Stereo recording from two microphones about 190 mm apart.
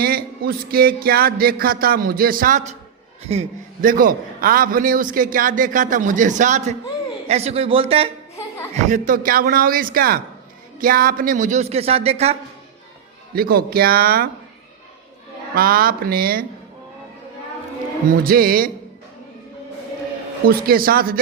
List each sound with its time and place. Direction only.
0.0 s a man's voice: 50° right (ahead or behind); by 8.1 s 30° right (ahead or behind)
8.9 s a man's voice: 45° right (ahead or behind)
13.3 s a man's voice: 50° right (ahead or behind)
15.5 s a man's voice: 50° right (ahead or behind)
18.1 s a man's voice: 50° right (ahead or behind)
20.4 s a man's voice: 50° right (ahead or behind)